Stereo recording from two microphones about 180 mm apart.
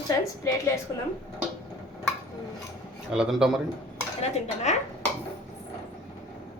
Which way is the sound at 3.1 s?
5° right (ahead or behind).